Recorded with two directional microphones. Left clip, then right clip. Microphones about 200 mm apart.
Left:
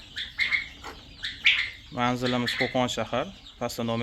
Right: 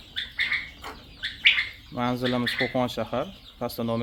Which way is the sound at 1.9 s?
Centre (ahead or behind).